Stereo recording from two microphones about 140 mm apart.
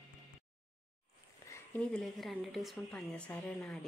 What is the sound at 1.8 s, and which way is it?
A woman's voice, 5° left (ahead or behind).